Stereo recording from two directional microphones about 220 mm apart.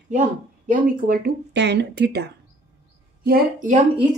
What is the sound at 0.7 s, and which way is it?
Speech, 40° right (ahead or behind).